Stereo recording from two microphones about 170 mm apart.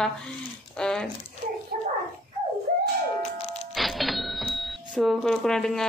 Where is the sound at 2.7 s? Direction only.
55° right (ahead or behind).